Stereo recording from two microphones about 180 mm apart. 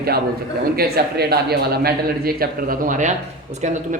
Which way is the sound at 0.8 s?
60° right (ahead or behind).